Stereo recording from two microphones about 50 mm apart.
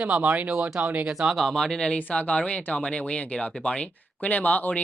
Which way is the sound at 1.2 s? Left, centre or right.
Centre.